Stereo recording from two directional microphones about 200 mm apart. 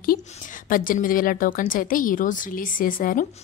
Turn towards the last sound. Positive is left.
turn(degrees=45)  # may be behind; listen again after turning